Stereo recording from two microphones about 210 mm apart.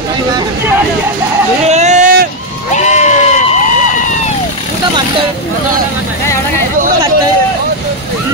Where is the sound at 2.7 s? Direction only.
35° left (ahead or behind).